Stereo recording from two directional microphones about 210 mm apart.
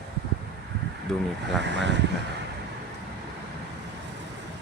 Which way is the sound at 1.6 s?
55° right (ahead or behind).